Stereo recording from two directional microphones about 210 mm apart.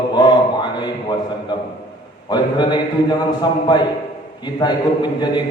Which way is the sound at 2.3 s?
20° left (ahead or behind).